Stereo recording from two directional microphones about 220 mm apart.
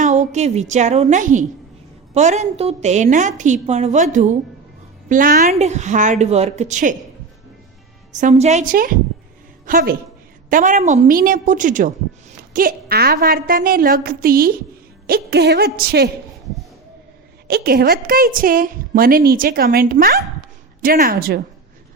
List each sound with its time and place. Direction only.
0.0 s a woman's voice: 35° right (ahead or behind)
8.1 s a woman's voice: 30° right (ahead or behind)
17.5 s a woman's voice: 45° right (ahead or behind)